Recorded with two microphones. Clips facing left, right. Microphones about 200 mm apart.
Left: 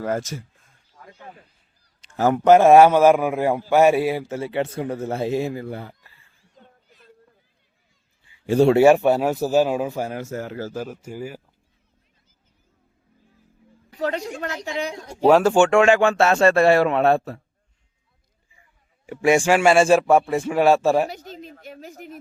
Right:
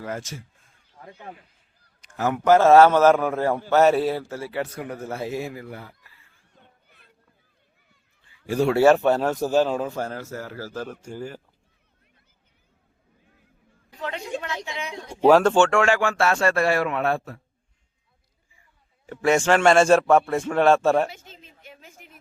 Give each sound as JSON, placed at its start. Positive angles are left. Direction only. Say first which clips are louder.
{"t": 0.0, "sound": "a woman's voice", "louder": "left 7 dB", "side_deg": 40}
{"t": 2.0, "sound": "a sound", "louder": "left 5 dB", "side_deg": 35}
{"t": 2.5, "sound": "a man's voice", "louder": "left 2 dB", "side_deg": 15}
{"t": 6.8, "sound": "run", "louder": "left 6 dB", "side_deg": -60}
{"t": 8.3, "sound": "a sound", "louder": "left 6 dB", "side_deg": 25}
{"t": 8.8, "sound": "speech", "louder": "left 2 dB", "side_deg": 10}
{"t": 11.0, "sound": "speech", "louder": "left 2 dB", "side_deg": 10}
{"t": 14.0, "sound": "a woman's voice", "louder": "left 5 dB", "side_deg": 40}
{"t": 15.1, "sound": "speech", "louder": "even", "side_deg": 0}
{"t": 15.5, "sound": "a man's voice", "louder": "left 4 dB", "side_deg": 15}
{"t": 19.0, "sound": "speech", "louder": "left 2 dB", "side_deg": 15}
{"t": 21.1, "sound": "speech", "louder": "left 9 dB", "side_deg": 40}
{"t": 21.6, "sound": "a sound", "louder": "left 10 dB", "side_deg": 40}